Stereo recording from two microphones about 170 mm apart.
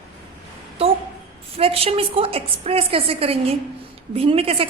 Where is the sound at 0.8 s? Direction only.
35° right (ahead or behind).